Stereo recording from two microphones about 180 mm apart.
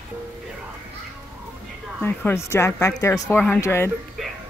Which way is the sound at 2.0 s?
15° left (ahead or behind).